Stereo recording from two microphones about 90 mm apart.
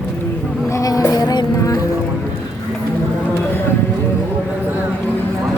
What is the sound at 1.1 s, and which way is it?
Music, 50° left (ahead or behind).